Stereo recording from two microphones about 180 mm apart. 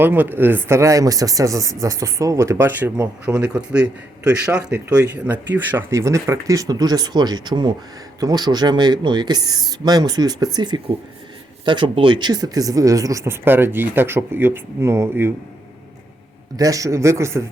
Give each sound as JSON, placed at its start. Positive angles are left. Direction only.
{"t": 0.0, "sound": "speech", "side_deg": -10}
{"t": 16.6, "sound": "speech", "side_deg": -20}